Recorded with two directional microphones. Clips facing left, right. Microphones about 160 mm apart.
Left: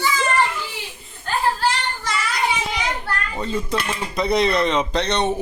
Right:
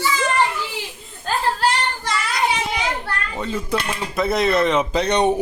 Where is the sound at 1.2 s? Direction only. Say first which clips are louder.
Right 1 dB; 65° right (ahead or behind).